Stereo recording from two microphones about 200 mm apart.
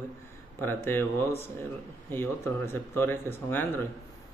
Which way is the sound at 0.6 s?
10° left (ahead or behind).